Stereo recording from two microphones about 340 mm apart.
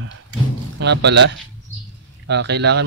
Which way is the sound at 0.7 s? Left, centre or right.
Right.